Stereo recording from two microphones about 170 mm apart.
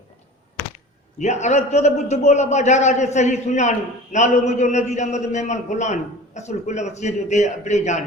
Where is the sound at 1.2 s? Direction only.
40° left (ahead or behind).